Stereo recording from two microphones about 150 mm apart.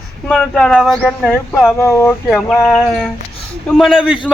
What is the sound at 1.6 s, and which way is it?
Speech, 15° left (ahead or behind).